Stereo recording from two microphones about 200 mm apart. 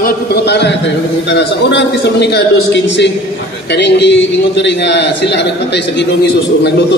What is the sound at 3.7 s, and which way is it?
A man's voice, 60° left (ahead or behind).